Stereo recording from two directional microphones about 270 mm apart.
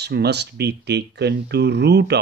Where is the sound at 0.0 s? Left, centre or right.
Right.